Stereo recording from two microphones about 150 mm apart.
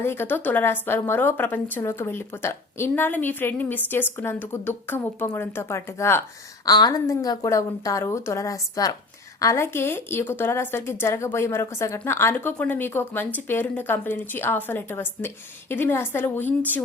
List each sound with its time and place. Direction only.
0.0 s a woman's voice: 15° left (ahead or behind)